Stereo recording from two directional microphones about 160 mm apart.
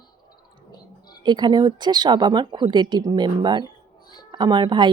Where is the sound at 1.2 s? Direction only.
30° right (ahead or behind).